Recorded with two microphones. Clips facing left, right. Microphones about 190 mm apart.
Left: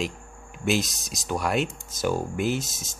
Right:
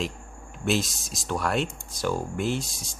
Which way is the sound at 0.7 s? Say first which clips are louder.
Left 1 dB; centre (ahead or behind).